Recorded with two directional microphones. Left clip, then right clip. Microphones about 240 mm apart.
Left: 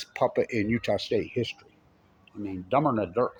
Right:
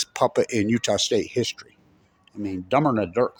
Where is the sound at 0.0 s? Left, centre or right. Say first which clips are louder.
Right 4 dB; right.